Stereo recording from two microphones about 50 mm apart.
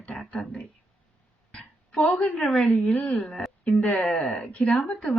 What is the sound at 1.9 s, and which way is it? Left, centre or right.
Speech, centre.